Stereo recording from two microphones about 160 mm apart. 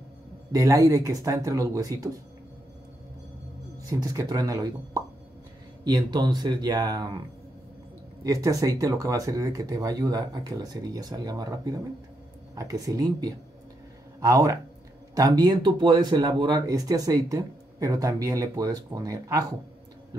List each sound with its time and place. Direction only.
0.5 s speech: 20° right (ahead or behind)
3.8 s speech: 20° right (ahead or behind)
8.2 s speech: 20° right (ahead or behind)